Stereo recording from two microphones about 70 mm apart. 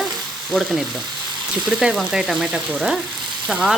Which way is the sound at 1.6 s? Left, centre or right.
Centre.